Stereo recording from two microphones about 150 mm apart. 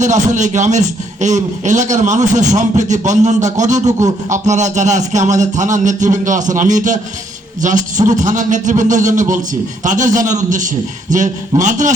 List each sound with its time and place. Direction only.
0.0 s a man's voice: 55° right (ahead or behind)